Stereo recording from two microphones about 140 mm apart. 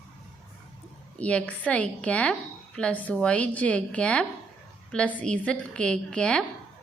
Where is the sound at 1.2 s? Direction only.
10° left (ahead or behind).